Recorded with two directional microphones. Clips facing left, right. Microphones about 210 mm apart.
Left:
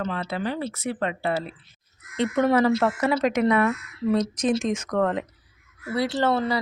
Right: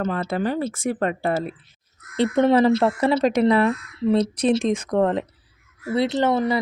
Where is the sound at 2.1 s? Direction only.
30° right (ahead or behind).